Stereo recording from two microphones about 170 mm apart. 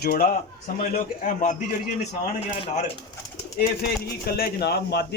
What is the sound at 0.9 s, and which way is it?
Speech, 50° left (ahead or behind).